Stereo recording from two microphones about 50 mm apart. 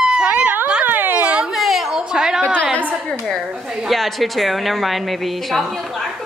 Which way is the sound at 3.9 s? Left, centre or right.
Centre.